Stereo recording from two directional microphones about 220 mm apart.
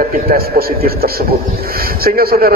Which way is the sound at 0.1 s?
40° right (ahead or behind).